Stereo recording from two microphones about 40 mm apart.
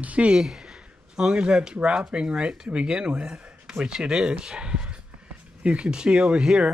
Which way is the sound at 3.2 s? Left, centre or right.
Right.